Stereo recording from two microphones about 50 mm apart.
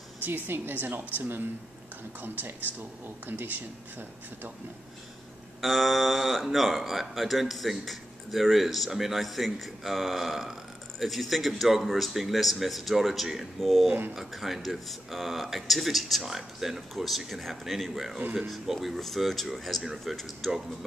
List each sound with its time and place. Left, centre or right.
0.2 s a woman's voice: right
5.6 s speech: centre